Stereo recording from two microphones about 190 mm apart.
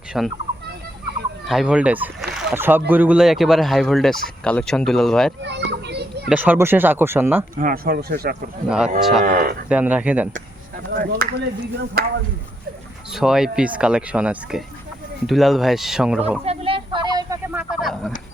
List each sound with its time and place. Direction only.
0.1 s speech: centre (ahead or behind)
1.5 s speech: 5° right (ahead or behind)
5.4 s children playing: 65° right (ahead or behind)
6.2 s speech: 10° right (ahead or behind)
7.5 s speech: 50° right (ahead or behind)
8.6 s speech: 5° right (ahead or behind)
9.2 s speech: 50° right (ahead or behind)
9.6 s speech: 5° right (ahead or behind)
10.9 s speech: 50° right (ahead or behind)
13.1 s speech: 5° right (ahead or behind)
16.4 s a sound: 30° right (ahead or behind); by 18.1 s centre (ahead or behind)